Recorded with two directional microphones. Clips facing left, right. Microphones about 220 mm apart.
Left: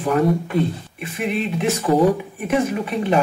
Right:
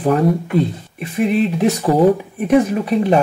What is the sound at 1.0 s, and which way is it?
Speech, 40° right (ahead or behind).